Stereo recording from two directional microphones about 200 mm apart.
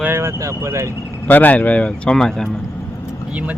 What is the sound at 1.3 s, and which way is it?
Speech, 10° left (ahead or behind).